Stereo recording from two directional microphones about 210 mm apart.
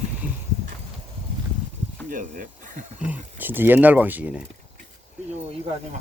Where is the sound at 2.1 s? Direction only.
40° right (ahead or behind).